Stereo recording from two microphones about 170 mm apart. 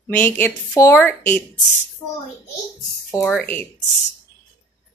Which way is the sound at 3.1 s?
10° left (ahead or behind).